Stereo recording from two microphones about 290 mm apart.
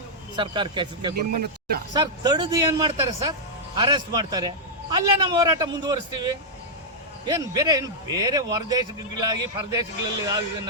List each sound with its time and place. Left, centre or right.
0.3 s a man's voice: centre
1.1 s speech: right
1.9 s a man's voice: centre
7.3 s a man's voice: centre